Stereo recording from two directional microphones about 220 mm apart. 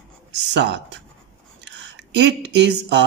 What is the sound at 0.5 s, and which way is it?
Speech, 50° right (ahead or behind).